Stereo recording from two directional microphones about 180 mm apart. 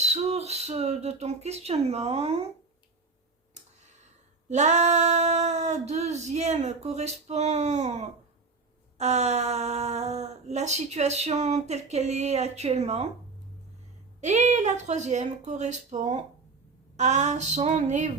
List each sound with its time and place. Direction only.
0.0 s speech: 35° right (ahead or behind)
4.4 s speech: 40° right (ahead or behind)
14.2 s speech: 40° right (ahead or behind)